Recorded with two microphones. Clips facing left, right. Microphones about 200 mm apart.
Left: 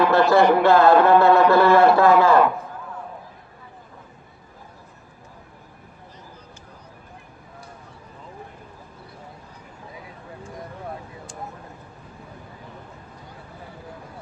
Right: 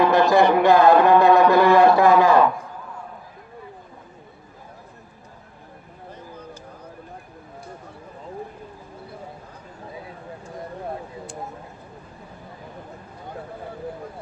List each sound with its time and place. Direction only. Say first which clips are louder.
0.0 s speech: even; 15° right (ahead or behind)